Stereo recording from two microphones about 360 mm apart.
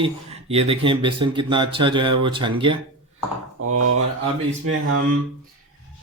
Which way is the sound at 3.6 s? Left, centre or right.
Right.